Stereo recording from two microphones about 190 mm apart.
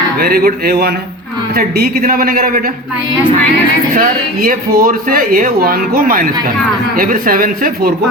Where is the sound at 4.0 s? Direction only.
50° right (ahead or behind).